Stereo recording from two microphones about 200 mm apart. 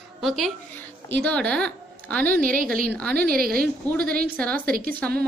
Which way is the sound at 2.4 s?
40° right (ahead or behind).